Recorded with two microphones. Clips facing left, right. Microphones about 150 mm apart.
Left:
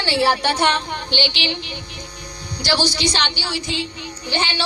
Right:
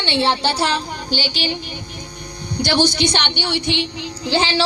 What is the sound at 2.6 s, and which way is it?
A woman's voice, 55° right (ahead or behind).